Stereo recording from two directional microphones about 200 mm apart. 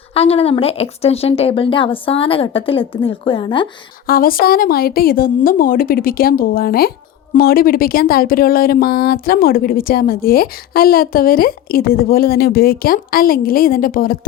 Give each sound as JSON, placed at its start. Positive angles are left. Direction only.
{"t": 0.1, "sound": "speech", "side_deg": 30}
{"t": 4.0, "sound": "speech", "side_deg": 45}